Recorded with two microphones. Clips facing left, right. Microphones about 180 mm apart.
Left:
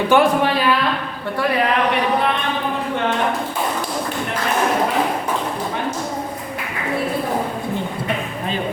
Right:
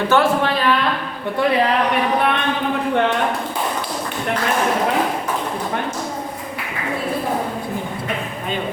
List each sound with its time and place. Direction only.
0.1 s a man's voice: 15° left (ahead or behind)